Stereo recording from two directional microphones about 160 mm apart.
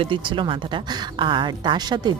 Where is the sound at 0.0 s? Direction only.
30° right (ahead or behind).